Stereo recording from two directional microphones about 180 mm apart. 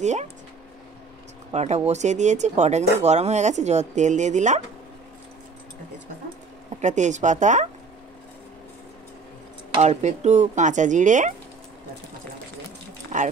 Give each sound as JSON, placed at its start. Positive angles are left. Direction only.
{"t": 0.0, "sound": "speech", "side_deg": -40}
{"t": 1.5, "sound": "speech", "side_deg": -40}
{"t": 6.8, "sound": "speech", "side_deg": -40}
{"t": 9.8, "sound": "speech", "side_deg": -40}
{"t": 13.1, "sound": "speech", "side_deg": -40}